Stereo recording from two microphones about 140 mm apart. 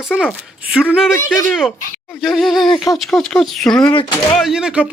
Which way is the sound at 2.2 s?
Centre (ahead or behind).